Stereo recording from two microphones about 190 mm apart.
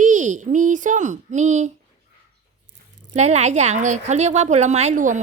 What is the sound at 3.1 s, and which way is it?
Speech, 35° right (ahead or behind).